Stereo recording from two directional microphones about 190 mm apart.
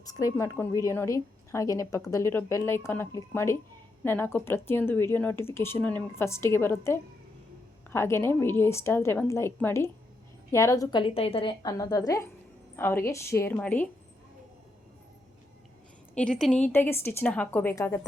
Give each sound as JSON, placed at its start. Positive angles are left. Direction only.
{"t": 0.0, "sound": "a woman's voice", "side_deg": 20}
{"t": 16.1, "sound": "a woman's voice", "side_deg": 5}